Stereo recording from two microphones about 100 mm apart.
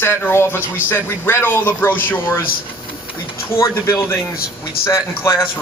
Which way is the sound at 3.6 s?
30° left (ahead or behind).